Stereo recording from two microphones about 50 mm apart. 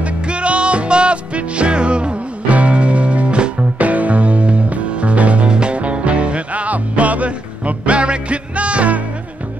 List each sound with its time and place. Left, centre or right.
0.0 s music: right